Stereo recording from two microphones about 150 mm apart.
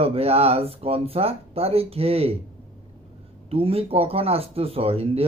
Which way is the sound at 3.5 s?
40° right (ahead or behind).